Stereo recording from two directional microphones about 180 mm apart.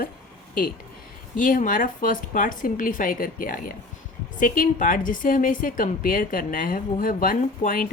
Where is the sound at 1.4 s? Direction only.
50° left (ahead or behind).